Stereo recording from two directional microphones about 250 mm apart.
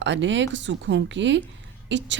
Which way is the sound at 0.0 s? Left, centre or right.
Right.